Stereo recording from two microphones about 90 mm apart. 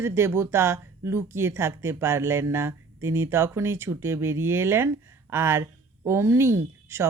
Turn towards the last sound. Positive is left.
turn(degrees=-30)  # may be behind; listen again after turning